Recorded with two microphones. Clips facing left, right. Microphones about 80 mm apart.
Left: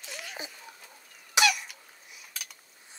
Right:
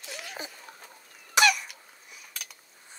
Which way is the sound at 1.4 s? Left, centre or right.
Right.